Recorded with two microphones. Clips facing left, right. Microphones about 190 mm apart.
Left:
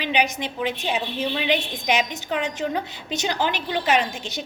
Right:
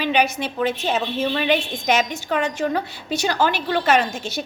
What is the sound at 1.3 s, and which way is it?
A woman's voice, 15° left (ahead or behind).